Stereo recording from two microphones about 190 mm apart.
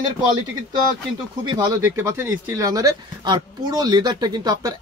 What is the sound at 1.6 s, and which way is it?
Speech, 15° right (ahead or behind).